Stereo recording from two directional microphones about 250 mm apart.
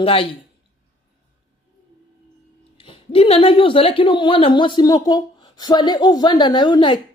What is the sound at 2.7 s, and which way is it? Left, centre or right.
A woman's voice, left.